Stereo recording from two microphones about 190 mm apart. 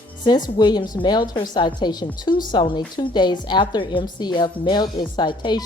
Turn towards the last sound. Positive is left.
turn(degrees=25)  # may be behind; listen again after turning